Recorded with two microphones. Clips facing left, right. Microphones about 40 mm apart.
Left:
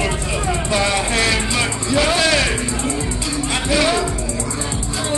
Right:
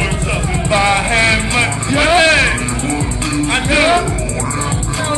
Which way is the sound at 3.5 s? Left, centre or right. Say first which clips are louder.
Right 5 dB; right.